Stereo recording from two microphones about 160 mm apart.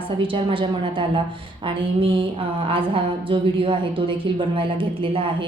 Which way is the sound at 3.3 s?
30° right (ahead or behind).